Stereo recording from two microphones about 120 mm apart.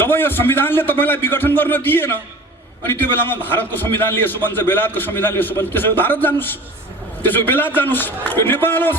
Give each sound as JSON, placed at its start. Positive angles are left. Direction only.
{"t": 0.0, "sound": "a man's voice", "side_deg": 20}